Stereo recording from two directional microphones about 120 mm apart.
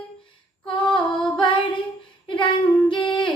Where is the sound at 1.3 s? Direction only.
45° left (ahead or behind).